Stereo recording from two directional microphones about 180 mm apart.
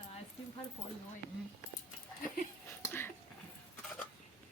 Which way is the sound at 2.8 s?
10° left (ahead or behind).